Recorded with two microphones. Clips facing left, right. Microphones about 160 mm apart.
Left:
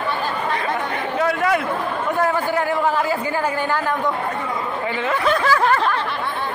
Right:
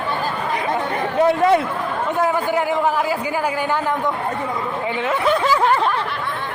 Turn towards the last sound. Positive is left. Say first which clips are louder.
# right 1 dB
turn(degrees=-10)  # may be behind; listen again after turning